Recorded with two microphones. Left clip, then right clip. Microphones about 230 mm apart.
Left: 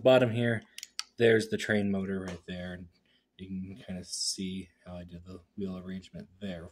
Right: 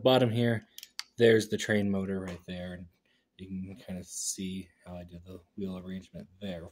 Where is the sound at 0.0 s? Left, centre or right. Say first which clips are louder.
Left 2 dB; centre.